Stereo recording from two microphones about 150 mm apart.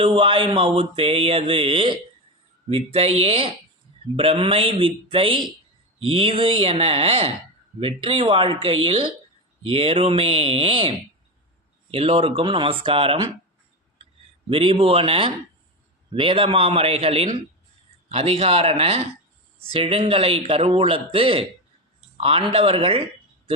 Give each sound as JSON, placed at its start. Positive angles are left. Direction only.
{"t": 0.0, "sound": "mantra", "side_deg": -35}
{"t": 2.6, "sound": "speech", "side_deg": -40}
{"t": 4.2, "sound": "mantra", "side_deg": -35}
{"t": 11.9, "sound": "speech", "side_deg": -40}
{"t": 12.4, "sound": "mantra", "side_deg": -35}
{"t": 14.5, "sound": "mantra", "side_deg": -40}